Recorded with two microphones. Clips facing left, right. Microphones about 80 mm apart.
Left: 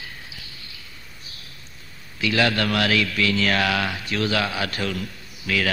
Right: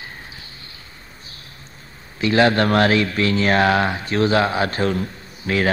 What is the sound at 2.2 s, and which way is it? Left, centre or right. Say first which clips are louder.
Speech: right 6 dB; right.